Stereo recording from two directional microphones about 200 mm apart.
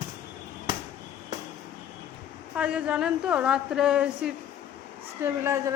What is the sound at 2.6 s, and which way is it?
A woman's voice, 5° right (ahead or behind).